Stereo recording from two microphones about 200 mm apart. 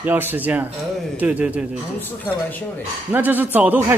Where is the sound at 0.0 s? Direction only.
10° right (ahead or behind).